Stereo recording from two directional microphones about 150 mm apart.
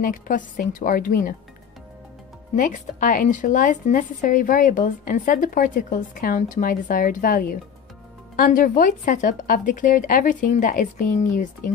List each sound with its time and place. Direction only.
0.0 s a woman's voice: 70° left (ahead or behind)
2.5 s speech: 60° left (ahead or behind)